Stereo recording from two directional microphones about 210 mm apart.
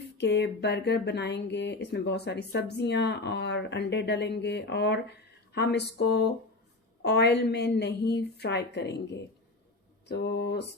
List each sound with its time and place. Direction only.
0.2 s speech: 55° left (ahead or behind)